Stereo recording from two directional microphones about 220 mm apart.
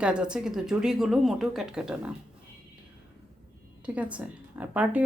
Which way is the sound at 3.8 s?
5° right (ahead or behind).